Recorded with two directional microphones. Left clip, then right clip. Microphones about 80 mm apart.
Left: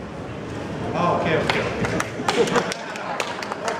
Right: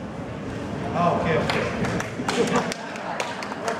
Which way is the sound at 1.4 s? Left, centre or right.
Left.